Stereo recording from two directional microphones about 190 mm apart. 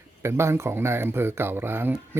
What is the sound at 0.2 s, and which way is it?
A man's voice, 15° right (ahead or behind).